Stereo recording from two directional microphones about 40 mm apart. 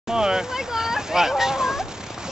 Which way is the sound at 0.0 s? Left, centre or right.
Centre.